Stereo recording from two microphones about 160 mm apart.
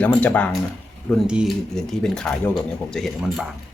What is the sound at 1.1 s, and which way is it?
Speech, centre (ahead or behind).